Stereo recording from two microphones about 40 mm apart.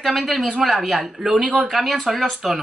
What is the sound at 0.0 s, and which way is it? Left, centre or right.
Speech, centre.